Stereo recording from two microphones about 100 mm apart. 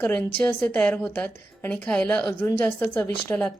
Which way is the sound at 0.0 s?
10° left (ahead or behind).